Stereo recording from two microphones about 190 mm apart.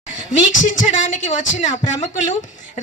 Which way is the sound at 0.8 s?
40° left (ahead or behind).